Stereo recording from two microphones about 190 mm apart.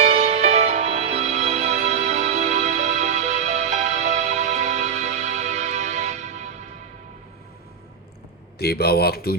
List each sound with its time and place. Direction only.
0.0 s music: 35° right (ahead or behind)
8.5 s speech: 55° left (ahead or behind)